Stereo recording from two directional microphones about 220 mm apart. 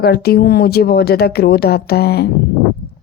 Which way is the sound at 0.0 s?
45° left (ahead or behind).